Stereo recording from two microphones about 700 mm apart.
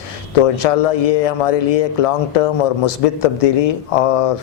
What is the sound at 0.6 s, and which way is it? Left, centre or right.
Speech, left.